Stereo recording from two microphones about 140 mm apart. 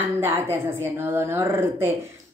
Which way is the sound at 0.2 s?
20° right (ahead or behind).